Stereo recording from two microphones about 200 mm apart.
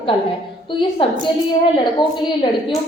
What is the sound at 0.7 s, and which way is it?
A woman's voice, 25° left (ahead or behind).